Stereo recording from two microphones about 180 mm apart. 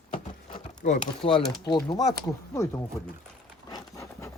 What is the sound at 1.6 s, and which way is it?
Speech, 25° left (ahead or behind).